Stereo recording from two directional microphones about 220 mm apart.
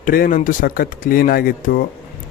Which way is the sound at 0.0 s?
40° left (ahead or behind).